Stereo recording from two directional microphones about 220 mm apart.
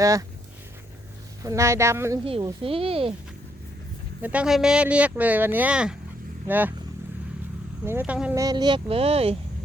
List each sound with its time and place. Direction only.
0.0 s speech: 15° right (ahead or behind)
1.4 s speech: 15° right (ahead or behind)
2.2 s speech: 25° right (ahead or behind)
4.2 s speech: 5° right (ahead or behind)
7.9 s speech: 10° right (ahead or behind); by 9.3 s 25° right (ahead or behind)